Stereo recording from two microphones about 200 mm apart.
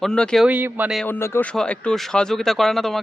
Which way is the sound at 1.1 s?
10° left (ahead or behind).